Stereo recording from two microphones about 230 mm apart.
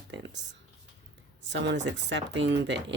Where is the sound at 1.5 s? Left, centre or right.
Right.